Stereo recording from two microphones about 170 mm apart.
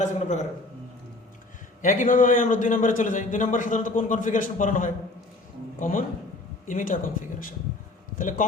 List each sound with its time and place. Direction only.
0.0 s a man's voice: 45° left (ahead or behind)
1.8 s a man's voice: 45° left (ahead or behind)